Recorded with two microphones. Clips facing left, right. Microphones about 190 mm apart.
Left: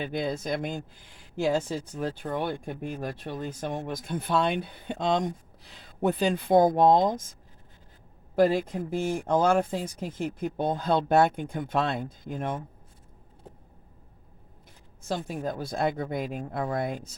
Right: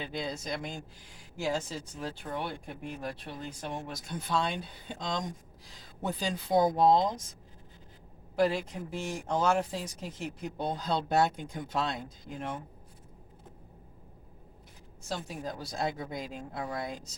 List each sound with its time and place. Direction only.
0.0 s speech: 55° left (ahead or behind)
8.4 s speech: 50° left (ahead or behind)
15.0 s speech: 55° left (ahead or behind)